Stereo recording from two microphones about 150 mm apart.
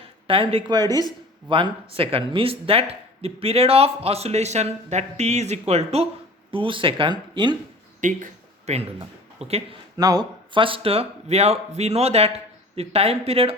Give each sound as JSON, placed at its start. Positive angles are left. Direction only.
{"t": 0.3, "sound": "speech", "side_deg": -35}
{"t": 8.0, "sound": "a man's voice", "side_deg": -50}
{"t": 10.0, "sound": "speech", "side_deg": -25}